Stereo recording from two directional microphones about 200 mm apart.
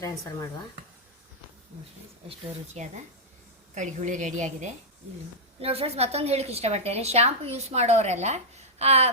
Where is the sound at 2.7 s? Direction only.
35° right (ahead or behind).